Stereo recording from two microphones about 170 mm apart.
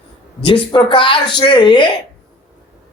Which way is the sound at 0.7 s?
30° left (ahead or behind).